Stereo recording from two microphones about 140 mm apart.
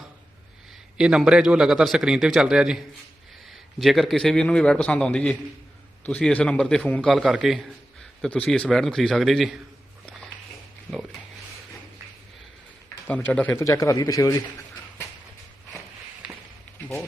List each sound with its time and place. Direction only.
0.9 s a man's voice: 5° right (ahead or behind)
13.1 s speech: 10° left (ahead or behind)
16.2 s a sound: 5° right (ahead or behind)